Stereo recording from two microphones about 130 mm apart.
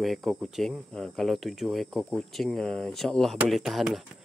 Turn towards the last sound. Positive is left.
turn(degrees=0)  # may be behind; listen again after turning